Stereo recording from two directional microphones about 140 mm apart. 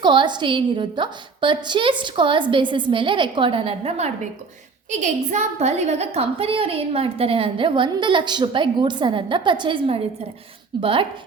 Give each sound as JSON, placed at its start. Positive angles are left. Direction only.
{"t": 0.0, "sound": "a woman's voice", "side_deg": -35}